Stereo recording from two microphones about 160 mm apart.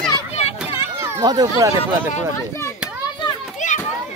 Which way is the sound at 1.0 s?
25° right (ahead or behind).